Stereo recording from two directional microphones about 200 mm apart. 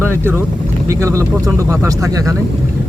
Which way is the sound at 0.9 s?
15° right (ahead or behind).